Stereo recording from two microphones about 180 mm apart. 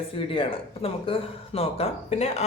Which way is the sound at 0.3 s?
30° left (ahead or behind).